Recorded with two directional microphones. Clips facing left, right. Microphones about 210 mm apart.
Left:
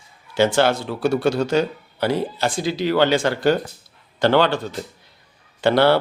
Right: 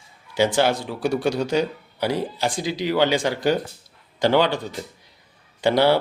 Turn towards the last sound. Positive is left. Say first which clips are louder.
# left 2 dB
turn(degrees=-15)  # may be behind; listen again after turning